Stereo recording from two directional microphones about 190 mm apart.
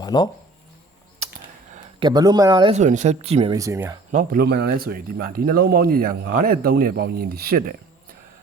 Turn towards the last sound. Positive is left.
turn(degrees=-50)  # may be behind; listen again after turning